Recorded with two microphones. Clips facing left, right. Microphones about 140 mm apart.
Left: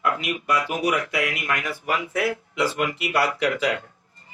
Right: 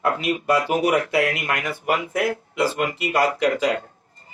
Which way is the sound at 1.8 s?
45° right (ahead or behind).